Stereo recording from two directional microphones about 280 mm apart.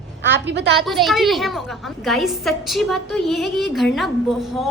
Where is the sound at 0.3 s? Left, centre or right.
Right.